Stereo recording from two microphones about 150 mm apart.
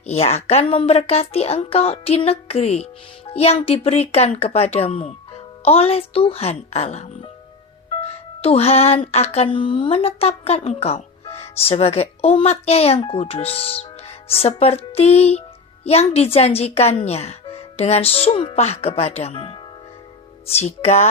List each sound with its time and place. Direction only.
0.1 s speech: 45° left (ahead or behind)